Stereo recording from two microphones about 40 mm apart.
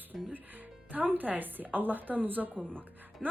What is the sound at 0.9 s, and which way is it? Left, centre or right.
Speech, right.